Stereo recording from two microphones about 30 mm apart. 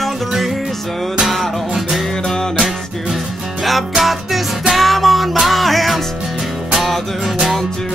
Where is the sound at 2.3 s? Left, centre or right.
Centre.